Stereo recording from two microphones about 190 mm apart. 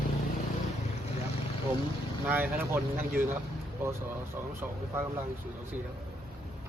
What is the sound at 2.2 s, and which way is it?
Speech, 10° right (ahead or behind).